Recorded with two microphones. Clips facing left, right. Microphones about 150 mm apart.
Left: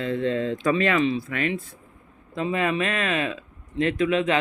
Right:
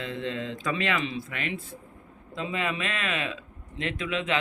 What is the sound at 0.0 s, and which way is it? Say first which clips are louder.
Speech: left 8 dB; 45° left (ahead or behind).